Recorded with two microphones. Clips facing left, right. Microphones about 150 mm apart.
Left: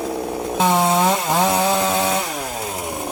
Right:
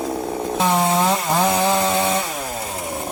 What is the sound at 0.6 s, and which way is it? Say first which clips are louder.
Chainsaw: left 2 dB; 10° left (ahead or behind).